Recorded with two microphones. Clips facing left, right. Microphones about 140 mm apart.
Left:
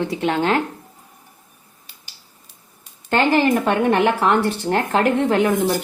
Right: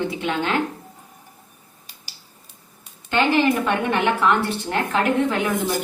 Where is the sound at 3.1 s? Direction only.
45° left (ahead or behind).